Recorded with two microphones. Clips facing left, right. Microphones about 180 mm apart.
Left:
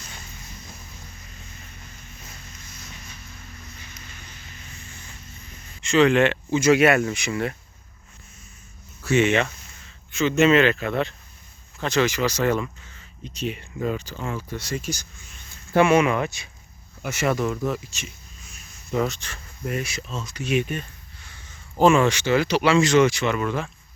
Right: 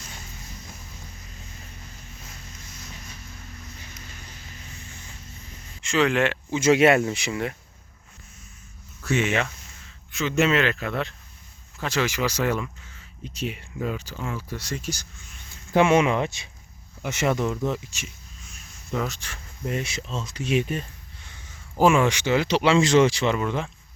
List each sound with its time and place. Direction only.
3.9 s a sound: 40° right (ahead or behind)
5.8 s speech: 5° right (ahead or behind)
6.5 s speech: 25° right (ahead or behind)
9.0 s speech: centre (ahead or behind)
14.8 s speech: 15° left (ahead or behind)
15.7 s speech: 20° right (ahead or behind)
18.9 s speech: 5° right (ahead or behind)
19.7 s speech: 25° right (ahead or behind)
21.8 s speech: 10° right (ahead or behind)